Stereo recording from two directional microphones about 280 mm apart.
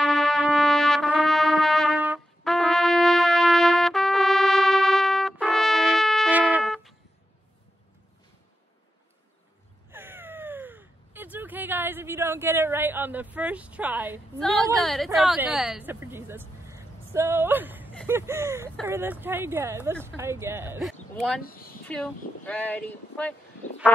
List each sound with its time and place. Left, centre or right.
0.0 s trumpet: centre
9.8 s crow: centre
15.1 s speech: centre
21.4 s speech: left
21.8 s speech: centre